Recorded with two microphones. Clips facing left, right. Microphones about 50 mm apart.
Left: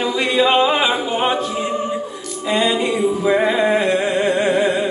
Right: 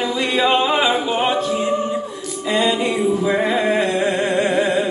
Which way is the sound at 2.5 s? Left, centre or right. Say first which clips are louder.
Left 1 dB; centre.